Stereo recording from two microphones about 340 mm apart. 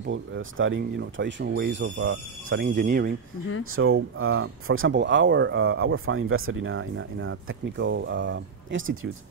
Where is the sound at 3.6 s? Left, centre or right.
Right.